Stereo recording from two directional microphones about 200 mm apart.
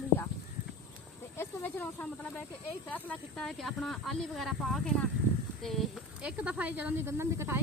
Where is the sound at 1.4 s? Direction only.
10° left (ahead or behind).